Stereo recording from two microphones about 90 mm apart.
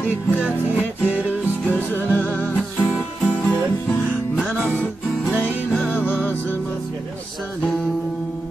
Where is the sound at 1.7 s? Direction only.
20° left (ahead or behind).